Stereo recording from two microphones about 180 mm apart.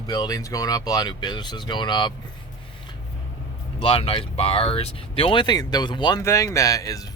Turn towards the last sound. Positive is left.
turn(degrees=20)  # may be behind; listen again after turning